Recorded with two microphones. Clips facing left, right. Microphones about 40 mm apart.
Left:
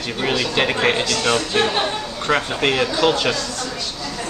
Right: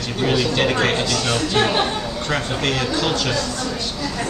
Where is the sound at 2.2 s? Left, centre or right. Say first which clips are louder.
Left 4 dB; left.